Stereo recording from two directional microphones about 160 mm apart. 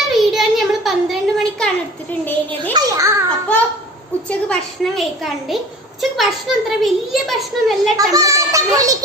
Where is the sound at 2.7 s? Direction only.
25° right (ahead or behind).